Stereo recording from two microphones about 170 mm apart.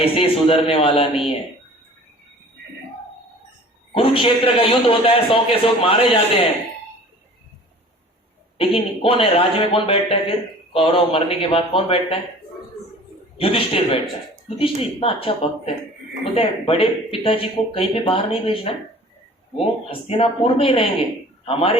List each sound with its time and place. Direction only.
0.0 s a man's voice: 30° left (ahead or behind)
3.9 s a man's voice: 30° left (ahead or behind)
8.5 s a man's voice: 30° left (ahead or behind)
13.4 s a man's voice: 35° left (ahead or behind)